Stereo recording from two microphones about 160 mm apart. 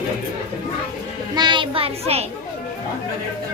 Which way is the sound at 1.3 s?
30° right (ahead or behind).